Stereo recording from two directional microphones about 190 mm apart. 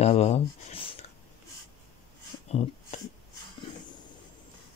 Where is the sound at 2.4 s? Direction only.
35° left (ahead or behind).